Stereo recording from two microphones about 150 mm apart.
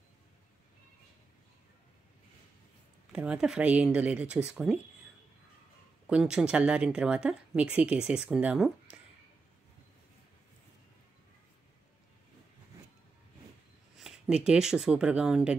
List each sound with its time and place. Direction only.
3.1 s a woman's voice: 5° right (ahead or behind)
6.0 s a woman's voice: 5° right (ahead or behind)
13.9 s speech: 5° right (ahead or behind)